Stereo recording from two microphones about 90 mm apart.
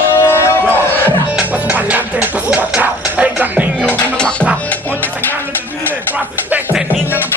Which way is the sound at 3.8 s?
15° left (ahead or behind).